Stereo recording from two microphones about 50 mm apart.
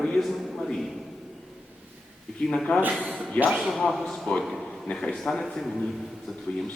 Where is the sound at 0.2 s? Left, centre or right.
Centre.